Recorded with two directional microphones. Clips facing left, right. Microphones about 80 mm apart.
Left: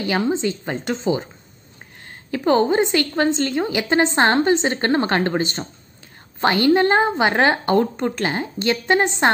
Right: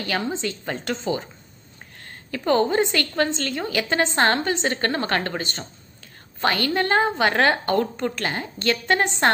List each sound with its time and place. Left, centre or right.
0.0 s a woman's voice: centre